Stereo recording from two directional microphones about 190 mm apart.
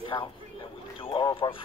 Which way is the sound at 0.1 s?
20° left (ahead or behind).